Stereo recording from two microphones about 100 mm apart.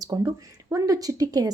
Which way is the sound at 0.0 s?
40° right (ahead or behind).